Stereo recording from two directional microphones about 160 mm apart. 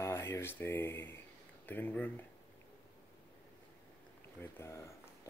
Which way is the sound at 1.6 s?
10° left (ahead or behind).